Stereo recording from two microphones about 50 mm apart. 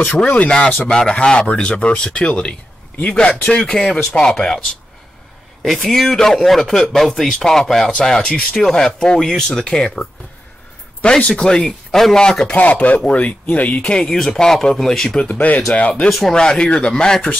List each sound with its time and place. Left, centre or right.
0.1 s speech: left
0.5 s speech: centre
5.8 s speech: centre
8.5 s speech: centre
11.1 s speech: centre
12.5 s speech: left
14.1 s speech: centre
15.2 s speech: left
16.1 s speech: centre